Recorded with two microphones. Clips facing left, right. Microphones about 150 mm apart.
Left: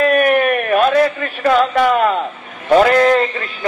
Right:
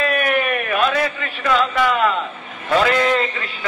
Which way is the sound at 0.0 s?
45° left (ahead or behind).